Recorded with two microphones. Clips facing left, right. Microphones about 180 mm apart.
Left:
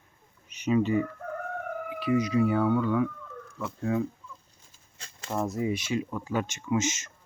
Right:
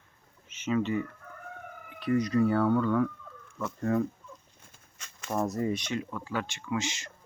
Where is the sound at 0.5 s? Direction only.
15° left (ahead or behind).